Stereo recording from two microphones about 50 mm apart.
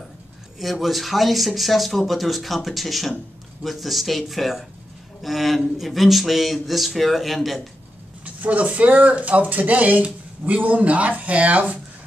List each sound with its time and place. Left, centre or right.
0.6 s speech: centre
8.4 s speech: right